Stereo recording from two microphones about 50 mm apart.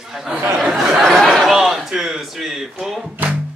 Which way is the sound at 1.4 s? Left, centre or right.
Centre.